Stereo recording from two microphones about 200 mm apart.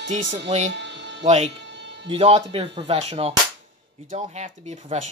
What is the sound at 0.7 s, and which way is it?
Music, 60° right (ahead or behind).